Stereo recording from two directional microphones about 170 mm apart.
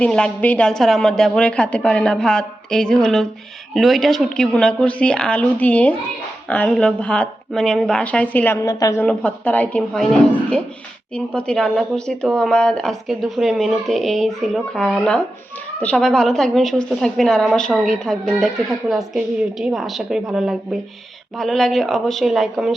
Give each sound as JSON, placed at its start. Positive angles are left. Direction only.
{"t": 0.0, "sound": "a woman's voice", "side_deg": 5}
{"t": 9.0, "sound": "speech", "side_deg": 10}
{"t": 11.3, "sound": "a woman's voice", "side_deg": 5}